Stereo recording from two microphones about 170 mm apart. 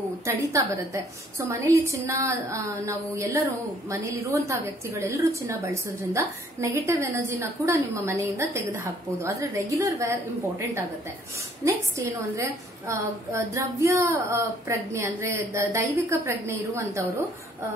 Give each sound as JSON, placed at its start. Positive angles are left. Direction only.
{"t": 0.2, "sound": "a woman's voice", "side_deg": -15}
{"t": 11.6, "sound": "a woman's voice", "side_deg": -15}